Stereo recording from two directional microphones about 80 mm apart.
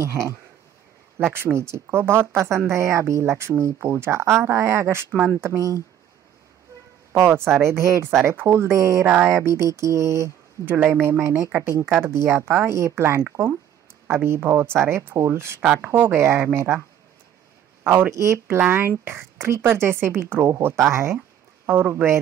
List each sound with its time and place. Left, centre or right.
0.0 s speech: right
7.1 s speech: right
9.0 s speech: right
9.3 s speech: right
17.8 s speech: right
21.6 s speech: right